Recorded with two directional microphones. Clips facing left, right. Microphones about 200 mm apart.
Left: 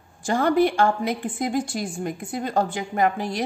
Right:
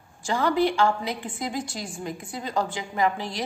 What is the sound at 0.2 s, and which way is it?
A woman's voice, 55° left (ahead or behind).